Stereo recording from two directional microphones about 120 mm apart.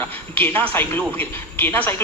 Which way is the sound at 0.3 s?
15° left (ahead or behind).